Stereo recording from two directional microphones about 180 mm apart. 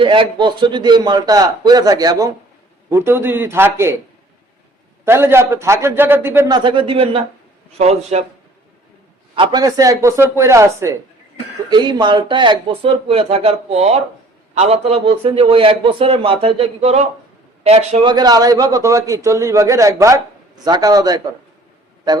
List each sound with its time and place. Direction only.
0.0 s a man's voice: 30° right (ahead or behind)
5.0 s speech: 15° right (ahead or behind)
6.5 s a man's voice: 30° right (ahead or behind)
9.3 s a man's voice: 25° right (ahead or behind)